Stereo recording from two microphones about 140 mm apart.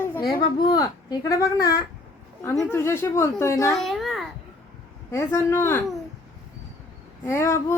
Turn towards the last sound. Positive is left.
turn(degrees=20)  # may be behind; listen again after turning